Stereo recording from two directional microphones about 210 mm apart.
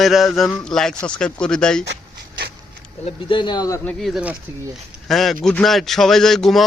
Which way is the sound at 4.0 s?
5° right (ahead or behind).